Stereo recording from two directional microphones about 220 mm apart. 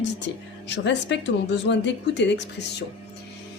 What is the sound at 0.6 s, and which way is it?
A woman's voice, 55° left (ahead or behind).